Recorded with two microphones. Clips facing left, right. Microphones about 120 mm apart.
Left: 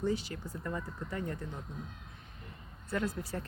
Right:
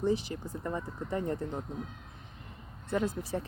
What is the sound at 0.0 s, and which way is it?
Speech, 20° right (ahead or behind).